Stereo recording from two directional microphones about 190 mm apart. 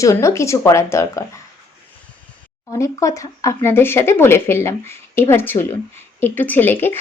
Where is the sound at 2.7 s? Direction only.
15° left (ahead or behind).